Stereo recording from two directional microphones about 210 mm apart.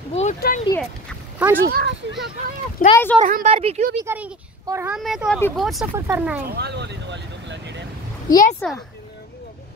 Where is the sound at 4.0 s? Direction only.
15° right (ahead or behind).